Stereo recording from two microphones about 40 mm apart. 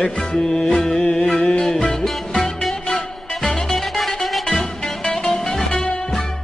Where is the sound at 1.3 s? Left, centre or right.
Left.